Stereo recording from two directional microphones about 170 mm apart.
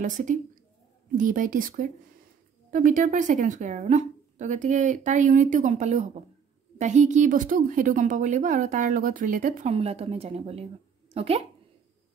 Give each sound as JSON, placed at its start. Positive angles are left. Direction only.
{"t": 0.0, "sound": "a woman's voice", "side_deg": -50}
{"t": 9.7, "sound": "speech", "side_deg": -35}